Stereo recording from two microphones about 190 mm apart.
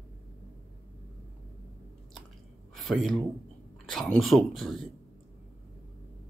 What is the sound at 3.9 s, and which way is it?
Speech, centre (ahead or behind).